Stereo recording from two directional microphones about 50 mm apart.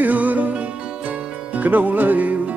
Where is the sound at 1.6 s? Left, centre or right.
Right.